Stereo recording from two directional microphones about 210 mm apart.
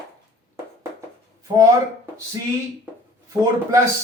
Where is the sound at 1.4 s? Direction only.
15° right (ahead or behind).